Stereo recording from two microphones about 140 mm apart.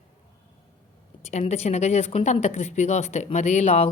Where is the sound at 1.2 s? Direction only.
50° left (ahead or behind).